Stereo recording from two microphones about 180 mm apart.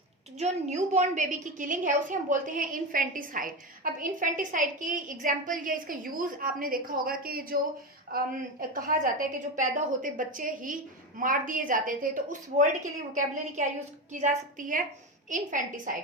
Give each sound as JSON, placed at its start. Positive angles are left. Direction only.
{"t": 0.3, "sound": "a woman's voice", "side_deg": -40}
{"t": 14.1, "sound": "a woman's voice", "side_deg": -45}